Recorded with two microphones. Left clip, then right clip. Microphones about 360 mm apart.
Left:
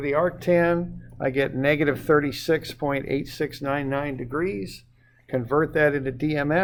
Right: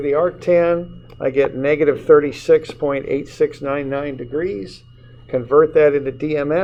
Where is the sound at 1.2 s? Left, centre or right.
Left.